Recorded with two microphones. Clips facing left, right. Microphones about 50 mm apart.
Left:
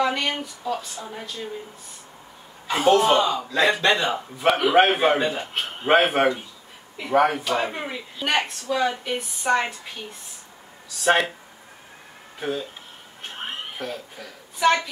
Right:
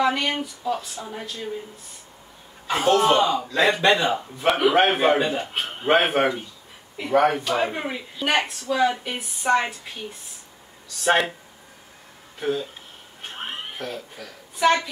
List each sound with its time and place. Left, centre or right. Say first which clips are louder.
0.0 s a man's voice: right 1 dB; centre
3.0 s a man's voice: right 1 dB; centre
11.1 s a man's voice: even; centre
12.4 s a man's voice: right 2 dB; centre
13.2 s a sound: even; centre
13.7 s a woman's voice: even; centre